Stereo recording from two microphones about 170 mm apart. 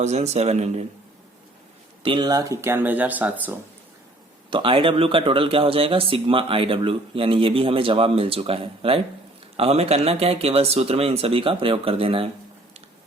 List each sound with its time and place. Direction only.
0.0 s speech: 40° right (ahead or behind)
2.0 s speech: 25° right (ahead or behind); by 3.6 s 10° right (ahead or behind)
4.5 s speech: 30° right (ahead or behind)